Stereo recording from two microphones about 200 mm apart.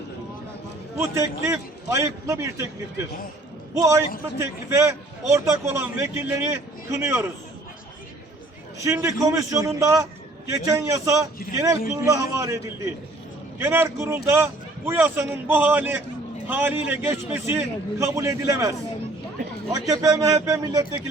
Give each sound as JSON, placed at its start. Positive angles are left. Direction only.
{"t": 0.9, "sound": "a man's voice", "side_deg": -15}
{"t": 3.8, "sound": "a man's voice", "side_deg": -15}
{"t": 8.8, "sound": "a man's voice", "side_deg": -15}
{"t": 19.9, "sound": "a man's voice", "side_deg": -15}